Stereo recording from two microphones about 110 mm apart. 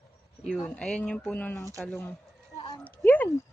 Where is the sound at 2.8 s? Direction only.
15° left (ahead or behind).